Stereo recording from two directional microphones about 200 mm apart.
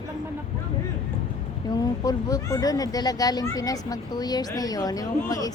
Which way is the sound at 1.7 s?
20° left (ahead or behind).